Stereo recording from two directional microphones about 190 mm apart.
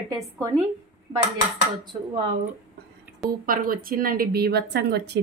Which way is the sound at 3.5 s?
50° right (ahead or behind).